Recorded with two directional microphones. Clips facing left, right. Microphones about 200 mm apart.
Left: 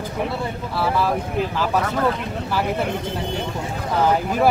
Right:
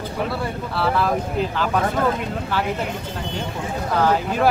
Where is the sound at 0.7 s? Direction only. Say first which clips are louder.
Even; 10° left (ahead or behind).